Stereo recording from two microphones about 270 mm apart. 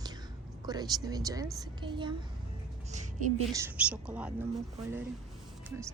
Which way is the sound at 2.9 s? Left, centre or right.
Right.